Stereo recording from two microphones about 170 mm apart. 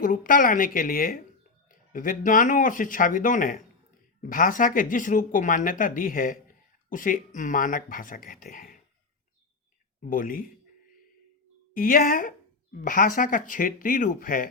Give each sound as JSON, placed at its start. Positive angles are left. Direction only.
{"t": 0.0, "sound": "a woman's voice", "side_deg": 50}
{"t": 10.0, "sound": "speech", "side_deg": 55}
{"t": 11.7, "sound": "a woman's voice", "side_deg": 55}